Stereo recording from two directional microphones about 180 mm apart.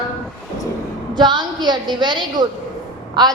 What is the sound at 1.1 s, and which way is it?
A woman's voice, 25° right (ahead or behind).